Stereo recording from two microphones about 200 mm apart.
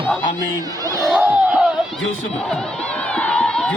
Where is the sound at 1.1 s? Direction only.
5° right (ahead or behind).